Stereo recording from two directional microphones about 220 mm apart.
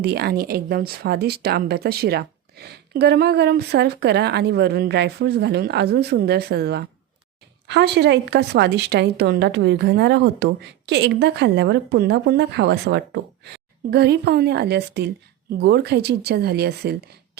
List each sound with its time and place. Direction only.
0.0 s speech: 45° right (ahead or behind)